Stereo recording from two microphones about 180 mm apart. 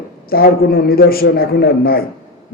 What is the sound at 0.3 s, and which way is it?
A man's voice, 55° left (ahead or behind).